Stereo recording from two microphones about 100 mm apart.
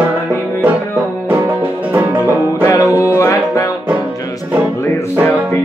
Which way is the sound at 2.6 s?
35° left (ahead or behind).